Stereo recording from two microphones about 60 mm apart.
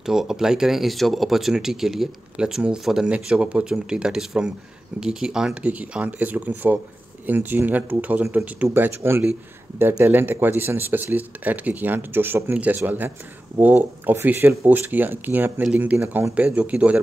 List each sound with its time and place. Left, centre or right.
0.0 s speech: centre
3.1 s speech: right
5.5 s speech: right
8.7 s speech: right